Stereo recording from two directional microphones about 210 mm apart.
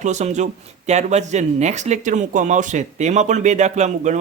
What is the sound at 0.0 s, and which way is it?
Speech, 35° right (ahead or behind).